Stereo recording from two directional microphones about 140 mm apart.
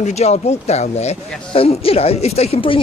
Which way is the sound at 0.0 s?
50° left (ahead or behind).